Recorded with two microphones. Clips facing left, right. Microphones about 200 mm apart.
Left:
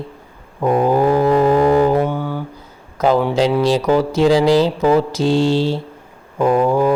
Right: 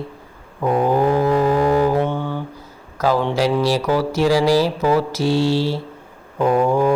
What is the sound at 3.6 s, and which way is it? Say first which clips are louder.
Mantra: left 3 dB; 20° left (ahead or behind).